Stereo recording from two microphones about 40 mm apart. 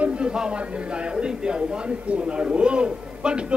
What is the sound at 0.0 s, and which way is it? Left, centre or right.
Speech, right.